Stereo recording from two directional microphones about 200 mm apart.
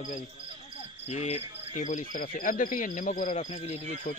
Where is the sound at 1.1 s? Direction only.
35° left (ahead or behind).